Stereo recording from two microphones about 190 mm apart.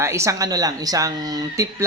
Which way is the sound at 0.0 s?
15° right (ahead or behind).